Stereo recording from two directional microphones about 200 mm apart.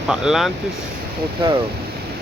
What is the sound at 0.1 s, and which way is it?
Speech, centre (ahead or behind).